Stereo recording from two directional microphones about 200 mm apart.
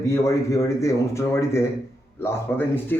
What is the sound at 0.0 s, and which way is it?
Speech, 15° left (ahead or behind).